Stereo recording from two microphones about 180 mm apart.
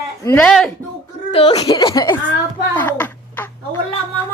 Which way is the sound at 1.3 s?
30° left (ahead or behind).